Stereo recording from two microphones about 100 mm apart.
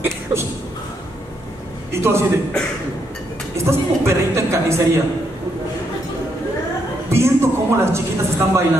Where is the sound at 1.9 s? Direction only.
25° right (ahead or behind).